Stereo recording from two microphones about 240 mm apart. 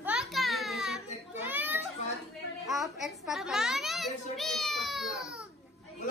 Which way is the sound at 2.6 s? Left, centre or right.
Centre.